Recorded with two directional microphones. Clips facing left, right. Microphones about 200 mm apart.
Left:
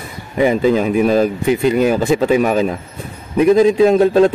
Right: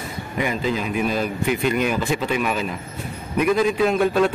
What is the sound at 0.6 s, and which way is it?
A man's voice, 45° left (ahead or behind).